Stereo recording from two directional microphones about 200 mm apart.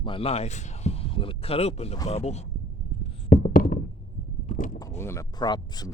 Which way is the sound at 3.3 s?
45° left (ahead or behind).